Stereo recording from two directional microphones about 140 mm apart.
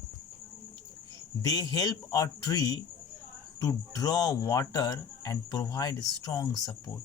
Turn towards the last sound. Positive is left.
turn(degrees=25)  # may be behind; listen again after turning